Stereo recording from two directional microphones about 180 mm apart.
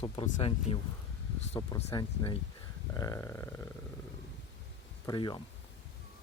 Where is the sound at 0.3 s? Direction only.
30° left (ahead or behind).